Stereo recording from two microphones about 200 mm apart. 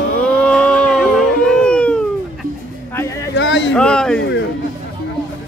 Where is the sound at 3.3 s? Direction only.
65° left (ahead or behind).